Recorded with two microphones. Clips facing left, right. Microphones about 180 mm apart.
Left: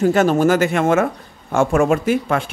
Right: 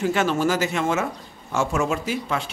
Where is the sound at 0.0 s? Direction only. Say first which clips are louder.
Left 7 dB; 45° left (ahead or behind).